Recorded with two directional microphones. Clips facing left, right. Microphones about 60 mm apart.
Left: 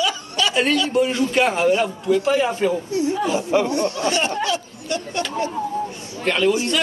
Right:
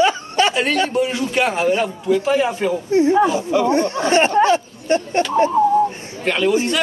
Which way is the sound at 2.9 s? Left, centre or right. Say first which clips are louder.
Right 6 dB; right.